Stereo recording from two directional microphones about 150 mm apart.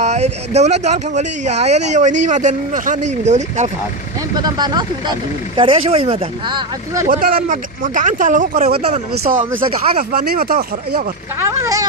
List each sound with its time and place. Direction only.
0.0 s speech: 50° right (ahead or behind)
4.4 s speech: 25° right (ahead or behind)
7.1 s speech: 70° right (ahead or behind)
10.0 s speech: 75° right (ahead or behind)
11.3 s speech: 20° right (ahead or behind)